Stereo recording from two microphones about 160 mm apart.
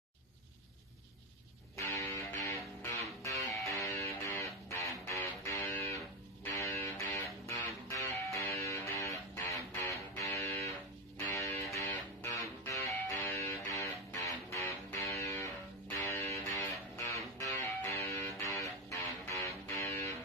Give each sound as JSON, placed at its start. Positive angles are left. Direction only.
{"t": 1.8, "sound": "music", "side_deg": 20}